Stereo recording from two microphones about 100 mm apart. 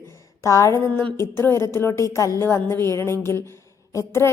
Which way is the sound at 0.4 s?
30° left (ahead or behind).